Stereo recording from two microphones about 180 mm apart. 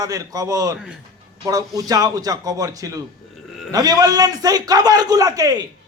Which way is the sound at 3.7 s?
20° right (ahead or behind).